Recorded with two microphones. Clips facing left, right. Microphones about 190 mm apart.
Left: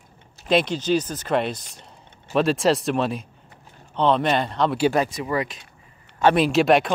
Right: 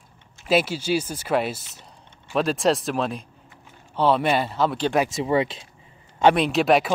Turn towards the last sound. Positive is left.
turn(degrees=0)  # may be behind; listen again after turning